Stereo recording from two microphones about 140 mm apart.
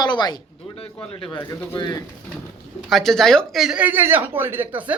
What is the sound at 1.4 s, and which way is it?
Speech, 30° left (ahead or behind).